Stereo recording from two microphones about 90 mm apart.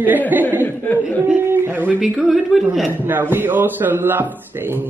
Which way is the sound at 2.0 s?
Centre (ahead or behind).